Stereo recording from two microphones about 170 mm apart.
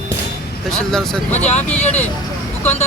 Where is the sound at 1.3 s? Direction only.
40° left (ahead or behind).